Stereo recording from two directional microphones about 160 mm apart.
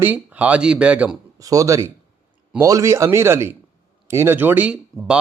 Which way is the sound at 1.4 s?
20° right (ahead or behind).